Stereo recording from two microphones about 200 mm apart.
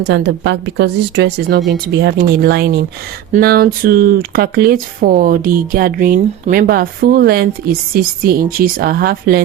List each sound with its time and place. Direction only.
0.1 s speech: 60° right (ahead or behind)